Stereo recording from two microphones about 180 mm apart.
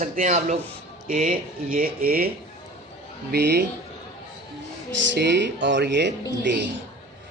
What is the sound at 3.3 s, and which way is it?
Speech, 65° right (ahead or behind).